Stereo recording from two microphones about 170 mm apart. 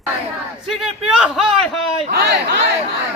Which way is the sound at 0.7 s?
Centre (ahead or behind).